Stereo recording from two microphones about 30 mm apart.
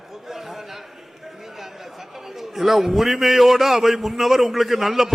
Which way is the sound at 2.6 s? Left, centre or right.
Centre.